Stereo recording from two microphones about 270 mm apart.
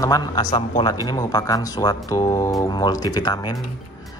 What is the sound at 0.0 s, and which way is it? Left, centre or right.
A man's voice, centre.